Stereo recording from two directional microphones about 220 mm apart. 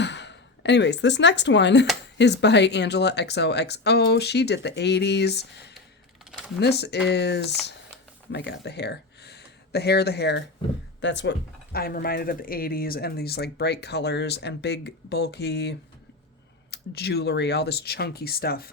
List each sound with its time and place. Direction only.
0.0 s speech: 50° left (ahead or behind)
16.7 s speech: 45° left (ahead or behind)